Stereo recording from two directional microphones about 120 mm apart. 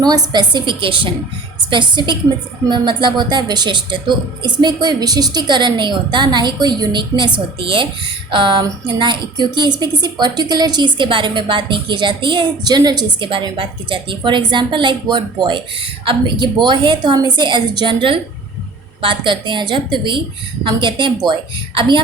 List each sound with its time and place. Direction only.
0.0 s a woman's voice: 35° right (ahead or behind)